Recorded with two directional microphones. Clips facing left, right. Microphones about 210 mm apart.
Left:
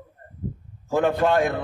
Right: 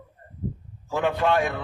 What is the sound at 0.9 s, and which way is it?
Speech, 45° left (ahead or behind).